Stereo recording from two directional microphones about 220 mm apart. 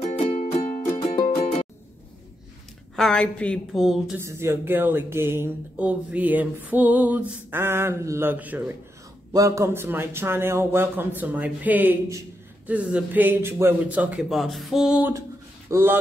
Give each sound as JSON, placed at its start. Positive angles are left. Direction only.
{"t": 0.0, "sound": "music", "side_deg": 30}
{"t": 3.0, "sound": "a woman's voice", "side_deg": 5}
{"t": 4.2, "sound": "speech", "side_deg": -10}